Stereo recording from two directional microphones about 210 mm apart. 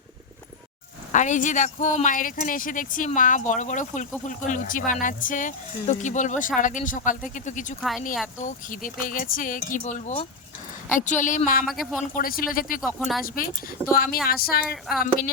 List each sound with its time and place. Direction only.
1.1 s speech: 35° left (ahead or behind)
7.8 s a woman's voice: centre (ahead or behind)
8.4 s speech: 40° left (ahead or behind)
11.6 s a woman's voice: centre (ahead or behind)
12.1 s speech: 45° left (ahead or behind)
12.8 s a woman's voice: centre (ahead or behind)
13.2 s speech: 45° left (ahead or behind)